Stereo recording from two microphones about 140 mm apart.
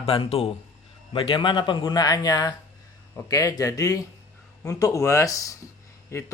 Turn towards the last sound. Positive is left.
turn(degrees=20)  # may be behind; listen again after turning